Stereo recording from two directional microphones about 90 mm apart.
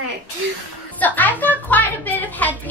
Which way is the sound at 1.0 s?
20° left (ahead or behind).